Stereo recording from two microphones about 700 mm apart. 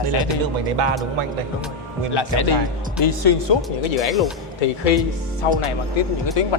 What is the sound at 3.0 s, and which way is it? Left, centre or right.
Speech, left.